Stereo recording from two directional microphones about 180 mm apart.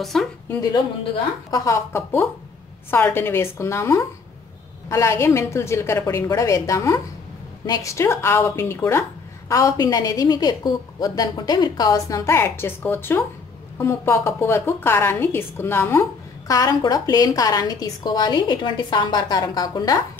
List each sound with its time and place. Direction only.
0.0 s a woman's voice: centre (ahead or behind)
1.5 s a woman's voice: 15° left (ahead or behind)